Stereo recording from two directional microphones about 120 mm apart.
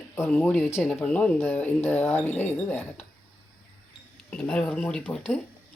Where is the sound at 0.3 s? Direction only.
10° left (ahead or behind).